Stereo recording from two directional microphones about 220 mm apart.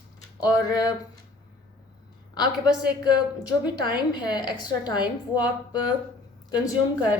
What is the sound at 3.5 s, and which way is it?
A woman's voice, 20° left (ahead or behind).